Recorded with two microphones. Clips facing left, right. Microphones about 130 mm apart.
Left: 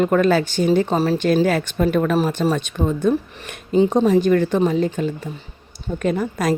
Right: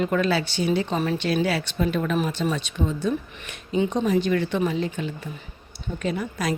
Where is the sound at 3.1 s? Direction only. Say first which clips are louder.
Left 6 dB; 35° left (ahead or behind).